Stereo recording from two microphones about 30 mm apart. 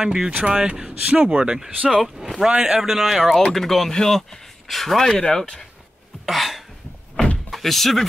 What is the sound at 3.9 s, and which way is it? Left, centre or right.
Speech, centre.